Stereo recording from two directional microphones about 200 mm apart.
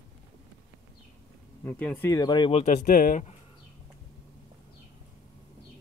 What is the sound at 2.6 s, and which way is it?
Speech, 40° left (ahead or behind).